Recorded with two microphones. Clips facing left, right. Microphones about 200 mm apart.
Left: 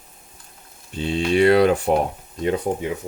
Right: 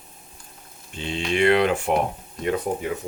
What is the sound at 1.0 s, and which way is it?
Speech, 40° left (ahead or behind).